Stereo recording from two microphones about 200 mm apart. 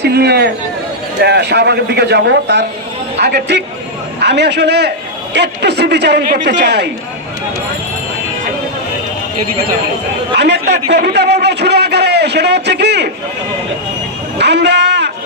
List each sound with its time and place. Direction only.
0.0 s a man's voice: 55° right (ahead or behind)
10.3 s a sound: 60° right (ahead or behind)
14.3 s speech: 60° right (ahead or behind)